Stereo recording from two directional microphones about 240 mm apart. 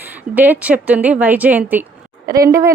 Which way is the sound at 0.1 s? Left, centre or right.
Centre.